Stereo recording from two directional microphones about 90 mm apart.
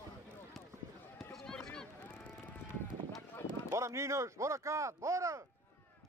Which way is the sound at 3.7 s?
30° right (ahead or behind).